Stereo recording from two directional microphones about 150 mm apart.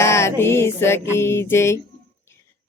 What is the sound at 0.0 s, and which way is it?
Music, 20° left (ahead or behind).